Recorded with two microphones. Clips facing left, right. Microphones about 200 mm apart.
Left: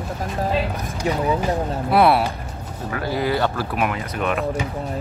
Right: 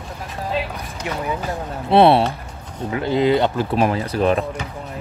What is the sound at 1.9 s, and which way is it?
Speech, 25° right (ahead or behind).